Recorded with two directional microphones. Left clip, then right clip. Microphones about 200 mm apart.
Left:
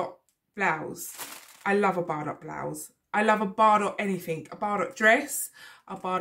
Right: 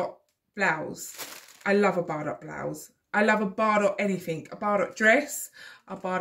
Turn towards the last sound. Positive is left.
turn(degrees=0)  # may be behind; listen again after turning